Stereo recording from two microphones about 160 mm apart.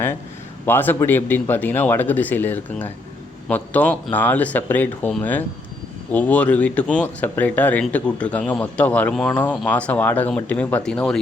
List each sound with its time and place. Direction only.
0.6 s speech: 10° left (ahead or behind)